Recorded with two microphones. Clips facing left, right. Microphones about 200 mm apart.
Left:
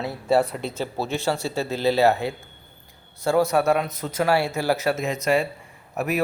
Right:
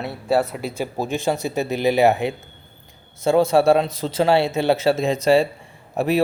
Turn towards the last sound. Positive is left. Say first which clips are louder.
# right 5 dB
turn(degrees=-30)  # may be behind; listen again after turning